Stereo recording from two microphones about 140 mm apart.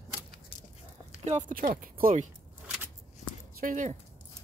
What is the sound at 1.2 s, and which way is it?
Speech, 60° right (ahead or behind).